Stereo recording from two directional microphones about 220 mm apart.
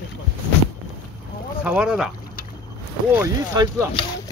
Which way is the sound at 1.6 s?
5° right (ahead or behind).